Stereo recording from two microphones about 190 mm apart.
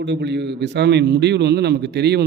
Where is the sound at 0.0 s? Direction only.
65° right (ahead or behind).